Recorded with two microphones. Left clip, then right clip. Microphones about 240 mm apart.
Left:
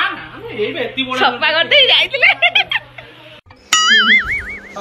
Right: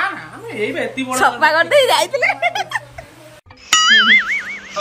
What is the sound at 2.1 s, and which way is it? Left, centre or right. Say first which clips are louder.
Giggle: left 5 dB; centre.